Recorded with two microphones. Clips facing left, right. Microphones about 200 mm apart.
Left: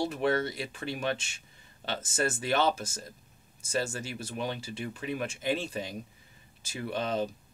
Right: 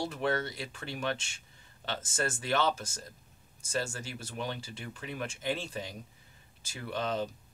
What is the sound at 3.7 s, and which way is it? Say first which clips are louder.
Speech: left 3 dB; 10° left (ahead or behind).